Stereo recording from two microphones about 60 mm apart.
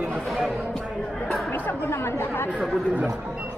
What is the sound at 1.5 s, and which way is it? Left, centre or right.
Speech, left.